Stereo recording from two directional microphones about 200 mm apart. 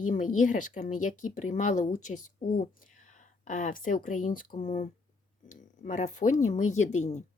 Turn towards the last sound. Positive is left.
turn(degrees=35)  # may be behind; listen again after turning